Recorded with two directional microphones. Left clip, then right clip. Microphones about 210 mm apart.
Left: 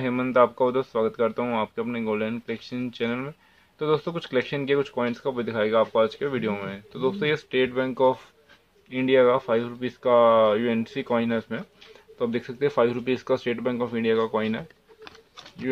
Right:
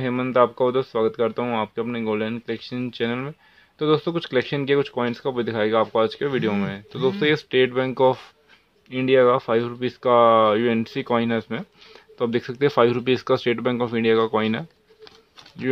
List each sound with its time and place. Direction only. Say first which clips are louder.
0.0 s speech: right 1 dB; 30° right (ahead or behind)